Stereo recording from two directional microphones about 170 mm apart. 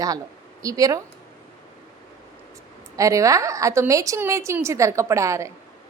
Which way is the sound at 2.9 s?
20° right (ahead or behind).